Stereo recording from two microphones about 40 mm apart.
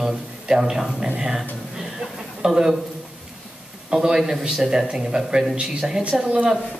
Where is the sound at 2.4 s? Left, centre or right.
Centre.